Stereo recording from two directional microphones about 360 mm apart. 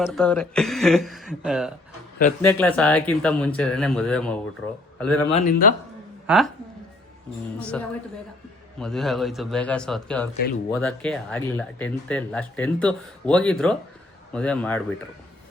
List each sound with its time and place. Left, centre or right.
0.0 s speech: centre
5.3 s speech: left
6.2 s speech: centre
7.6 s speech: centre